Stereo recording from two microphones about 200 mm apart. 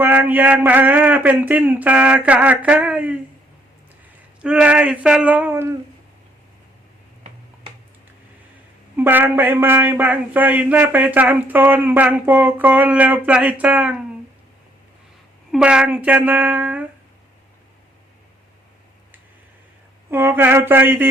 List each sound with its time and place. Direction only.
0.0 s a man's voice: 10° right (ahead or behind)
4.4 s a man's voice: 5° right (ahead or behind)
9.0 s a man's voice: 10° right (ahead or behind)
15.5 s a man's voice: 5° right (ahead or behind)
20.1 s a man's voice: 10° right (ahead or behind)